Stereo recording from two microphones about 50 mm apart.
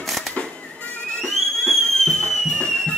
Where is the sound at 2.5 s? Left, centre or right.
Centre.